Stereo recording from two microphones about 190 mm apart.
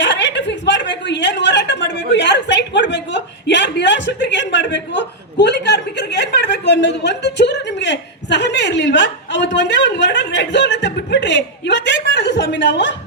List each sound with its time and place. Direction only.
0.0 s chuckle: 70° left (ahead or behind)